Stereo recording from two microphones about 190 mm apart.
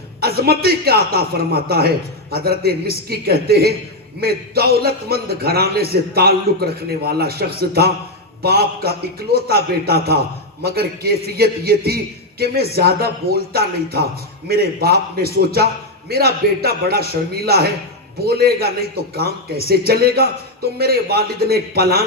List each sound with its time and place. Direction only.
0.2 s a man's voice: 55° right (ahead or behind)